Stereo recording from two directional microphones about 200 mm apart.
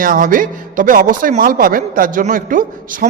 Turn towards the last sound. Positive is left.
turn(degrees=-40)  # may be behind; listen again after turning